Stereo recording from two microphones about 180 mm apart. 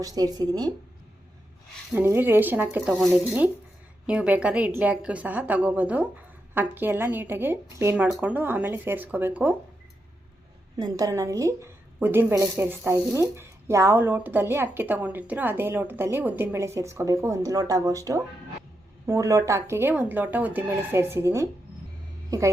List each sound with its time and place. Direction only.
0.0 s speech: 20° right (ahead or behind)
1.9 s a woman's voice: 10° right (ahead or behind)
10.8 s a woman's voice: 20° right (ahead or behind)